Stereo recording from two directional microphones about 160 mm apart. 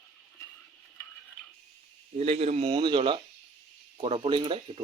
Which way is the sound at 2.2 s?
40° right (ahead or behind).